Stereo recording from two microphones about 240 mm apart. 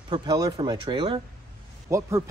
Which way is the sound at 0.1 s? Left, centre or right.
Centre.